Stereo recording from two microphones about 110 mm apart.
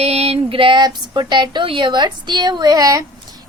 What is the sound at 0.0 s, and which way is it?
A woman's voice, 65° right (ahead or behind).